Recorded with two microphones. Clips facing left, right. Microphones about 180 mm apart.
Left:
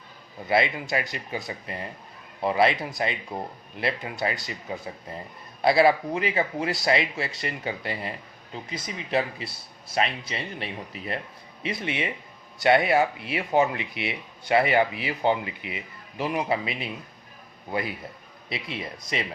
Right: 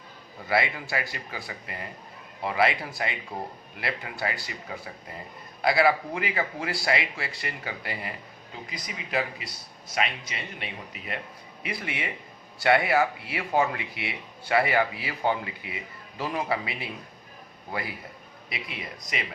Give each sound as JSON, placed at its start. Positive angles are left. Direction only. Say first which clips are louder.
{"t": 0.4, "sound": "speech", "louder": "left 3 dB", "side_deg": 20}
{"t": 5.6, "sound": "speech", "louder": "left 3 dB", "side_deg": 25}
{"t": 11.6, "sound": "speech", "louder": "left 4 dB", "side_deg": 25}
{"t": 18.4, "sound": "speech", "louder": "left 4 dB", "side_deg": 30}